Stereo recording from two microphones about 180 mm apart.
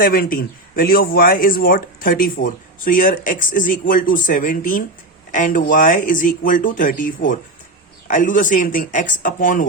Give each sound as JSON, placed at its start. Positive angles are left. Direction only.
{"t": 0.0, "sound": "speech", "side_deg": 55}